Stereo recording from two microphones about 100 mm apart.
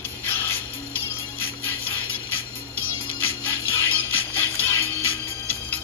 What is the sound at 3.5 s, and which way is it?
Music, 20° left (ahead or behind).